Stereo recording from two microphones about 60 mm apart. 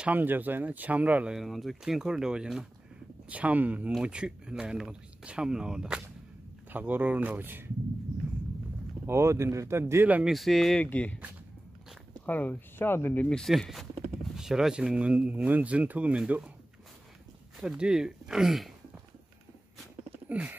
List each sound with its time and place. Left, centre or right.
0.0 s speech: right
1.3 s speech: centre
3.3 s speech: right
4.0 s speech: centre
6.7 s speech: right
9.0 s speech: right
10.2 s speech: centre
10.8 s speech: left
12.3 s speech: left
13.5 s speech: centre
17.6 s speech: centre
20.2 s a sound: right